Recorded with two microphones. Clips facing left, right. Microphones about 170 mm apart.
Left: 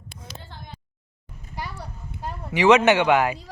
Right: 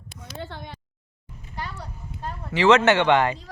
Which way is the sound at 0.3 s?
75° right (ahead or behind).